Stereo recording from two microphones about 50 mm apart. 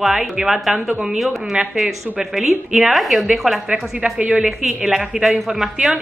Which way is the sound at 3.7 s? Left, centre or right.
Right.